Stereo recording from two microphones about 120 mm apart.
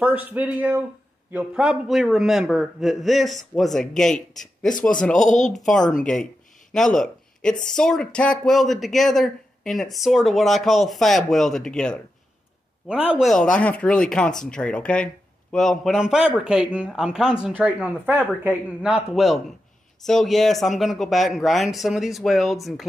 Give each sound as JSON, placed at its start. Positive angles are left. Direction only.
{"t": 0.0, "sound": "a man's voice", "side_deg": -15}
{"t": 5.2, "sound": "a woman's voice", "side_deg": 90}
{"t": 5.7, "sound": "speech", "side_deg": 5}
{"t": 6.7, "sound": "a sound", "side_deg": 5}
{"t": 7.6, "sound": "speech", "side_deg": 5}
{"t": 12.8, "sound": "a man's voice", "side_deg": -10}
{"t": 13.3, "sound": "a man's voice", "side_deg": 10}